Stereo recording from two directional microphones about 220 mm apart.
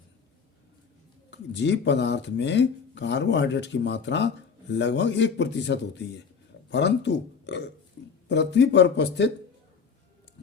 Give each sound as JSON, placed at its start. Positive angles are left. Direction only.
{"t": 1.3, "sound": "speech", "side_deg": 50}
{"t": 8.0, "sound": "a sound", "side_deg": 50}
{"t": 8.3, "sound": "speech", "side_deg": 50}